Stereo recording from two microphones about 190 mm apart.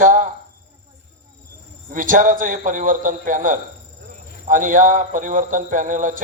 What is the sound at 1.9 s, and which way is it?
A man's voice, 45° right (ahead or behind).